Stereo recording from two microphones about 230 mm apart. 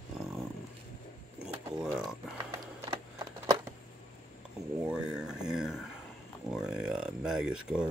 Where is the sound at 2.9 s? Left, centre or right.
Centre.